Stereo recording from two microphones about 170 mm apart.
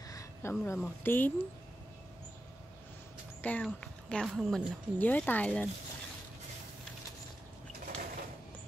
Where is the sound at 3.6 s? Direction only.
5° left (ahead or behind).